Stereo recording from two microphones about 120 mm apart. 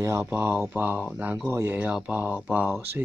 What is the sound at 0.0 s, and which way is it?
Speech, 20° right (ahead or behind).